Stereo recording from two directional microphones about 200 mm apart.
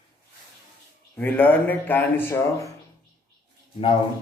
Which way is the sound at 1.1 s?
10° left (ahead or behind).